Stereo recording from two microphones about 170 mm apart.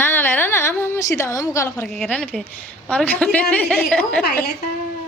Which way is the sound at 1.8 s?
Centre (ahead or behind).